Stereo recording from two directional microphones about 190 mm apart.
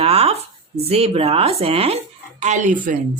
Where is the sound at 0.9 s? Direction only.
30° right (ahead or behind).